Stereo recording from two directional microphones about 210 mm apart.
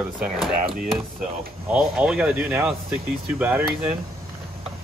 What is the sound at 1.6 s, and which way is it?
Speech, 5° right (ahead or behind).